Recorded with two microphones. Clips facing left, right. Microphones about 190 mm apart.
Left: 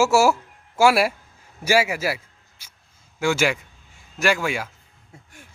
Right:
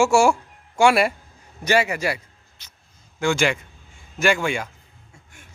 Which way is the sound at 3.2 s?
5° left (ahead or behind).